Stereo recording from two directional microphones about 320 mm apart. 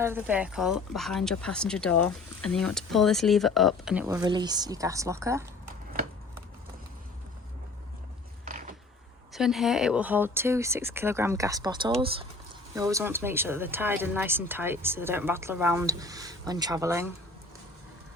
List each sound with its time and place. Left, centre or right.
0.0 s speech: centre
8.4 s mechanisms: right
9.3 s speech: centre